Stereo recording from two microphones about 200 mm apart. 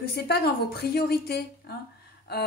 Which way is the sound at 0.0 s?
50° left (ahead or behind).